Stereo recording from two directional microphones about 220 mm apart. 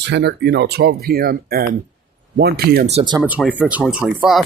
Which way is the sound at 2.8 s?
25° right (ahead or behind).